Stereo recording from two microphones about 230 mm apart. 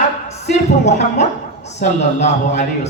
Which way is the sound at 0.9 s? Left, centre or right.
Left.